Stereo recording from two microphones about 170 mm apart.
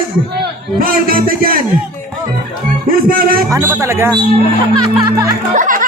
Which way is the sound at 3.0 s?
55° right (ahead or behind).